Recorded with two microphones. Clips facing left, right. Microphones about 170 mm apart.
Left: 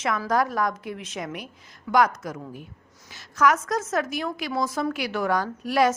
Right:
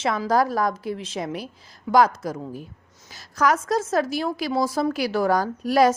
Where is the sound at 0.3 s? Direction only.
35° right (ahead or behind).